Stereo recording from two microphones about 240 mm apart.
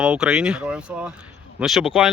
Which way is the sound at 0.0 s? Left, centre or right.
Centre.